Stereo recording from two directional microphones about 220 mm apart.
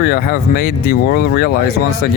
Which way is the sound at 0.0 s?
45° left (ahead or behind).